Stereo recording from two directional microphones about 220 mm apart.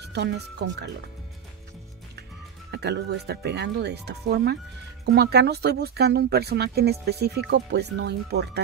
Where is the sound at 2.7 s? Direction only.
50° right (ahead or behind).